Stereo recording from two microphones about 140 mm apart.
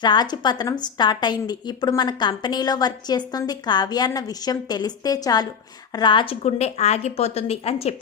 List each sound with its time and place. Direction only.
0.0 s a woman's voice: 30° left (ahead or behind)
6.4 s a woman's voice: 50° left (ahead or behind)